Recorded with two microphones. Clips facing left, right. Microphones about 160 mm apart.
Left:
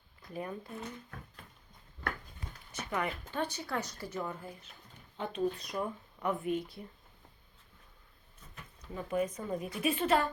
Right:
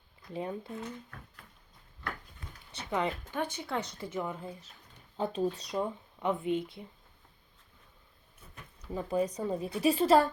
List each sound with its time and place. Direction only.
0.3 s speech: 20° right (ahead or behind)
2.9 s speech: 20° right (ahead or behind)
5.1 s speech: 35° right (ahead or behind)
8.9 s a woman's voice: 30° right (ahead or behind)